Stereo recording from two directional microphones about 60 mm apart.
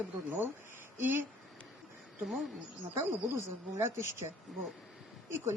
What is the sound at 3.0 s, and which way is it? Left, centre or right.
Speech, right.